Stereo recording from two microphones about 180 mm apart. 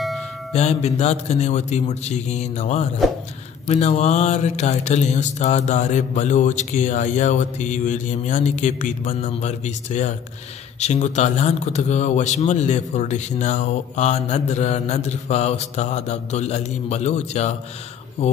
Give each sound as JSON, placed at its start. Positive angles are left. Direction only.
{"t": 0.5, "sound": "speech", "side_deg": 35}